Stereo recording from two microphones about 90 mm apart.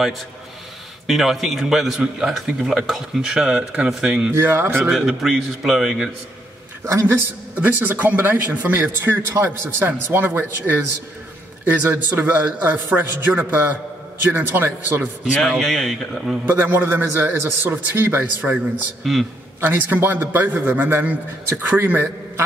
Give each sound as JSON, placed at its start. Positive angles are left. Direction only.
{"t": 1.0, "sound": "a man's voice", "side_deg": 0}
{"t": 4.3, "sound": "a man's voice", "side_deg": -30}
{"t": 4.8, "sound": "a man's voice", "side_deg": -5}
{"t": 6.8, "sound": "a man's voice", "side_deg": -35}
{"t": 7.6, "sound": "a man's voice", "side_deg": -20}
{"t": 15.4, "sound": "a man's voice", "side_deg": 0}
{"t": 16.4, "sound": "a man's voice", "side_deg": -20}
{"t": 19.1, "sound": "a man's voice", "side_deg": 0}
{"t": 19.6, "sound": "a man's voice", "side_deg": -20}